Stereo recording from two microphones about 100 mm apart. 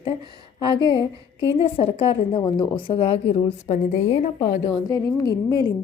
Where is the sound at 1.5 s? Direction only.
70° left (ahead or behind).